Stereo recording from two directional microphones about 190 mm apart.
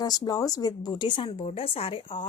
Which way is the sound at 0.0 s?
20° left (ahead or behind).